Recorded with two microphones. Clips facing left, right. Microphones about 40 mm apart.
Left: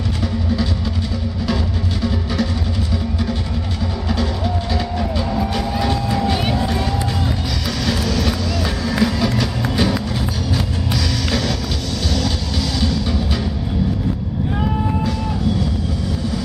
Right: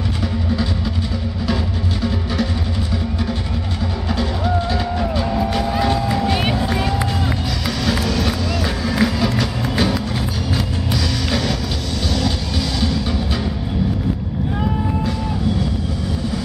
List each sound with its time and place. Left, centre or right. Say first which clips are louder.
4.7 s music: right 1 dB; centre
7.8 s run: even; centre